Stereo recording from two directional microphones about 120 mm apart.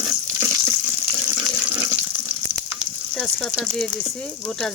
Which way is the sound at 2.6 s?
Centre (ahead or behind).